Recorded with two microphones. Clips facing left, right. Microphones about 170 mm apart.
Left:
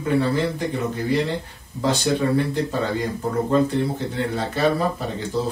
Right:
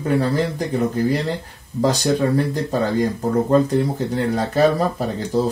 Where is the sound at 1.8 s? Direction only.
40° right (ahead or behind).